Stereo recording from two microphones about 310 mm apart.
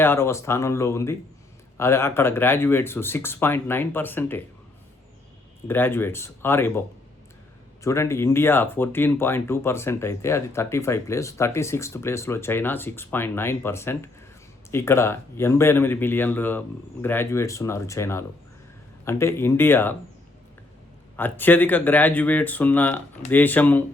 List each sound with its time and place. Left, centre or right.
0.0 s speech: centre
5.6 s speech: centre
7.9 s speech: centre
21.2 s speech: centre